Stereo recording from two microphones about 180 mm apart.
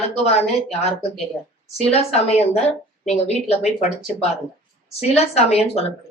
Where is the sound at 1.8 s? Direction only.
35° left (ahead or behind).